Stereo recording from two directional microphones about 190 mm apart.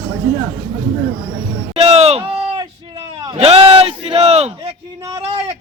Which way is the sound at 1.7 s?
35° right (ahead or behind).